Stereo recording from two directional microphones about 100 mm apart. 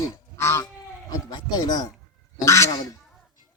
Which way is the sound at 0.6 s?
40° left (ahead or behind).